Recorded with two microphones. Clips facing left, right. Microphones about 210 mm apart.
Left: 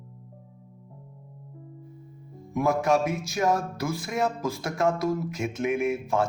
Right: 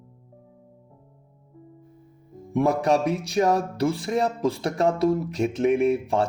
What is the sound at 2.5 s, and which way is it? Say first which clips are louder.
Speech: right 2 dB; 35° right (ahead or behind).